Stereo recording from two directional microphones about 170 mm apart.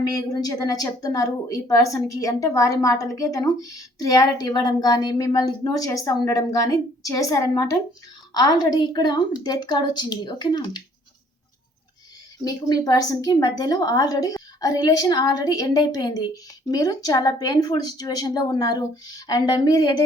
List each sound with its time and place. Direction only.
0.1 s a woman's voice: 20° left (ahead or behind)
12.5 s a woman's voice: 20° left (ahead or behind)